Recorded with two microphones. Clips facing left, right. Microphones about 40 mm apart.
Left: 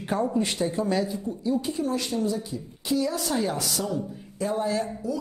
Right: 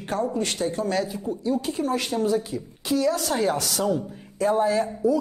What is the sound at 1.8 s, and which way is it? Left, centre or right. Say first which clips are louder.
Speech: right 2 dB; right.